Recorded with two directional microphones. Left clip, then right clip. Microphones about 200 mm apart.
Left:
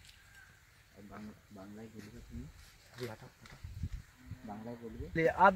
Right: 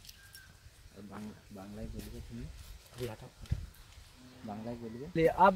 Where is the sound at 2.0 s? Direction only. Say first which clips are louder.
Right 4 dB; 35° right (ahead or behind).